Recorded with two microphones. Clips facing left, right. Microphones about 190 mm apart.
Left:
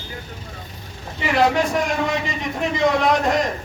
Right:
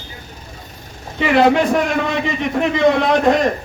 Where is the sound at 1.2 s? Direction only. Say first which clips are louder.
Right 5 dB; 60° right (ahead or behind).